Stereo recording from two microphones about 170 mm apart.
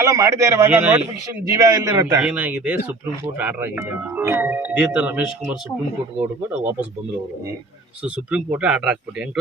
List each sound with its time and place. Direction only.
0.0 s a man's voice: 20° right (ahead or behind)
2.2 s speech: 5° right (ahead or behind)
8.0 s speech: 5° right (ahead or behind)